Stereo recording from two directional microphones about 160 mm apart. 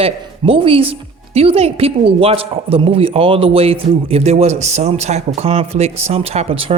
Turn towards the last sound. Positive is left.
turn(degrees=-35)  # may be behind; listen again after turning